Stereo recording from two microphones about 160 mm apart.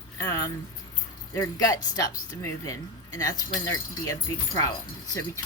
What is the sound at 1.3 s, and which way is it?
Speech, 20° left (ahead or behind).